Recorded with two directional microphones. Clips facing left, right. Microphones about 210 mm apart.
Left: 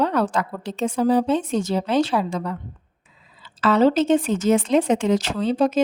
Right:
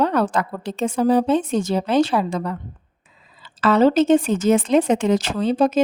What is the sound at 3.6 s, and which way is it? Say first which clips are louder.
A woman's voice: right 2 dB; 50° right (ahead or behind).